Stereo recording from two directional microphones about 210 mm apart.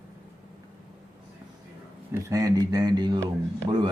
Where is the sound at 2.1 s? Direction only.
15° right (ahead or behind).